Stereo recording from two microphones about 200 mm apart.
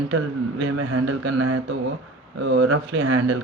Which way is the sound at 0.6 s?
85° right.